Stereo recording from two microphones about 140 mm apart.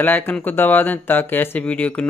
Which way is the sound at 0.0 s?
10° left (ahead or behind).